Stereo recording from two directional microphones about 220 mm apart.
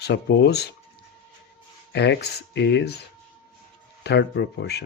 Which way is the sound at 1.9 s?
50° left (ahead or behind).